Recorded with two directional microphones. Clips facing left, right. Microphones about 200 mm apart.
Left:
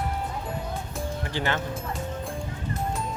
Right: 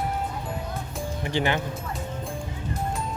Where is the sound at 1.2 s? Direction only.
15° right (ahead or behind).